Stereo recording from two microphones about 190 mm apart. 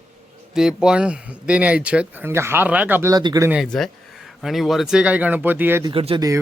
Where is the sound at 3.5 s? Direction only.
Centre (ahead or behind).